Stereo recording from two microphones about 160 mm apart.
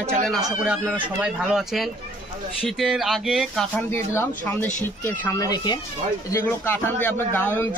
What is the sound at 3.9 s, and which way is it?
Speech, 15° left (ahead or behind).